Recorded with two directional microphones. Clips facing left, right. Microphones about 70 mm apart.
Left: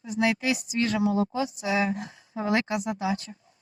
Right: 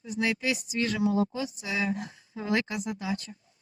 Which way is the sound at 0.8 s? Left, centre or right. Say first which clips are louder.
Left 1 dB; left.